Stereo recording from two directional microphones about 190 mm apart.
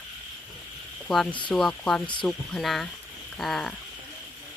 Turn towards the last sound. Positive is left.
turn(degrees=0)  # may be behind; listen again after turning